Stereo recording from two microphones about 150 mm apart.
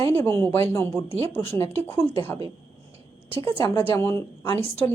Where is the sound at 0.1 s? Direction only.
15° left (ahead or behind).